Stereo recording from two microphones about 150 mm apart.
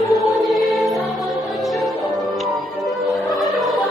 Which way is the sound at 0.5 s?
Centre (ahead or behind).